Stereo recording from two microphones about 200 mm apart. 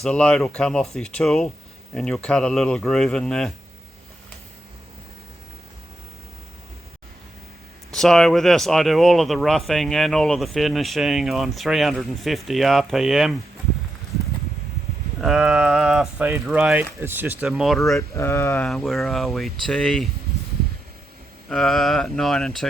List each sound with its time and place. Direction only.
0.0 s speech: 5° left (ahead or behind)
7.9 s speech: centre (ahead or behind)
15.2 s speech: centre (ahead or behind)
17.9 s speech: 15° left (ahead or behind)
21.5 s speech: centre (ahead or behind)